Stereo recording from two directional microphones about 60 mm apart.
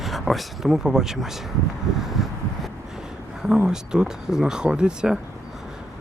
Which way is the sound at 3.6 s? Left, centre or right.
Centre.